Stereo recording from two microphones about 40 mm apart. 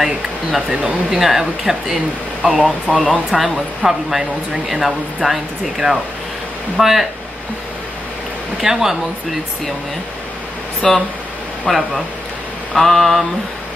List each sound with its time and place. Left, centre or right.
0.6 s speech: centre
3.3 s speech: centre
8.5 s speech: centre
10.8 s speech: centre
11.6 s speech: centre